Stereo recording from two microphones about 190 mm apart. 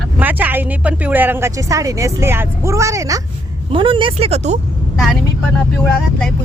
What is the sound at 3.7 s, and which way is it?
Speech, 25° right (ahead or behind).